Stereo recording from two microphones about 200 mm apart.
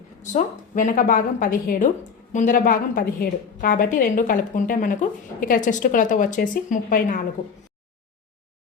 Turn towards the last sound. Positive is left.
turn(degrees=45)  # may be behind; listen again after turning